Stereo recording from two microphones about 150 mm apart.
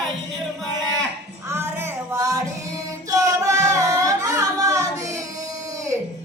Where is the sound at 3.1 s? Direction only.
20° right (ahead or behind).